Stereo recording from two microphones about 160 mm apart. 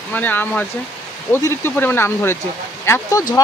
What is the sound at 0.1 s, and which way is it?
Speech, 10° left (ahead or behind).